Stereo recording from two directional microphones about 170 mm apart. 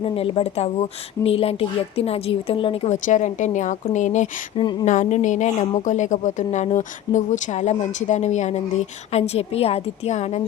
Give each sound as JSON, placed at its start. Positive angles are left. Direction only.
{"t": 0.0, "sound": "speech", "side_deg": 35}